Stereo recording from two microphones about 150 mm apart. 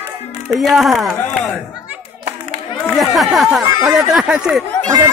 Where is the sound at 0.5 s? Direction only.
Centre (ahead or behind).